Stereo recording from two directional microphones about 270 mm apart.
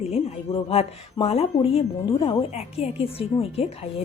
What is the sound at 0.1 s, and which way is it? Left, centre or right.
Speech, left.